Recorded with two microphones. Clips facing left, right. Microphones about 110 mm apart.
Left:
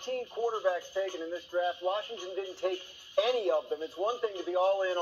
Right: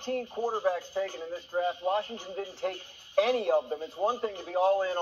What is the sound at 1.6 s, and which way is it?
A man's voice, 35° right (ahead or behind).